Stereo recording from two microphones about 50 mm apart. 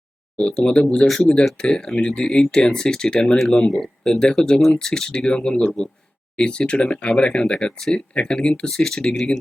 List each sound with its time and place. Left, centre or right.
0.5 s speech: centre
0.9 s speech: centre
1.2 s speech: centre